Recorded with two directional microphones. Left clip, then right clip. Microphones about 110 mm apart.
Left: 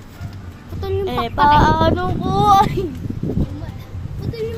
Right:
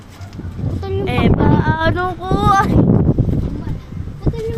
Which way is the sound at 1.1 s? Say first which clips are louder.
Left 3 dB; 10° right (ahead or behind).